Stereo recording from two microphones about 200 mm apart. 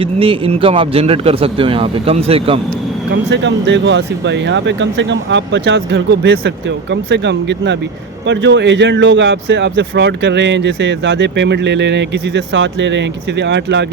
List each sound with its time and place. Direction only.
0.0 s a man's voice: 25° right (ahead or behind)
3.1 s speech: 60° right (ahead or behind)